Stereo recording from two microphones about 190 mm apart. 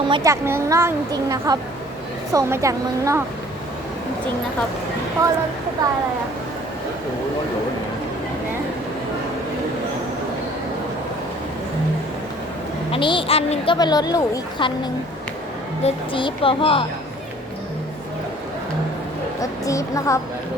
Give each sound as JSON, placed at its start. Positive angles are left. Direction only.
{"t": 0.0, "sound": "speech", "side_deg": -20}
{"t": 5.2, "sound": "speech", "side_deg": -15}
{"t": 12.9, "sound": "a woman's voice", "side_deg": 25}
{"t": 15.8, "sound": "a woman's voice", "side_deg": 25}
{"t": 19.4, "sound": "a woman's voice", "side_deg": 15}